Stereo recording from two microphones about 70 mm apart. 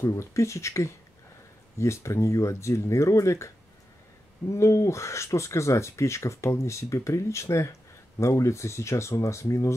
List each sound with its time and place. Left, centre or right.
0.0 s speech: left